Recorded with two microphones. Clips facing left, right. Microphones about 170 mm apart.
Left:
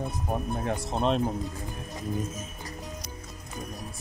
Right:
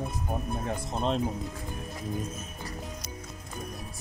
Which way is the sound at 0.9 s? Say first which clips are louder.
Left 3 dB; 70° left (ahead or behind).